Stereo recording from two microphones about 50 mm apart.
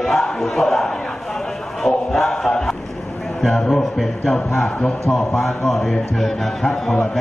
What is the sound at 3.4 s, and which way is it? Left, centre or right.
A man's voice, centre.